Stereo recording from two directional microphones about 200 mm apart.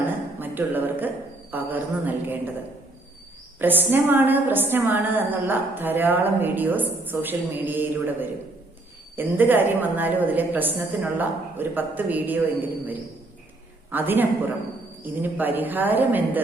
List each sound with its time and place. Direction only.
0.0 s a man's voice: 10° right (ahead or behind)
3.6 s a woman's voice: 10° right (ahead or behind)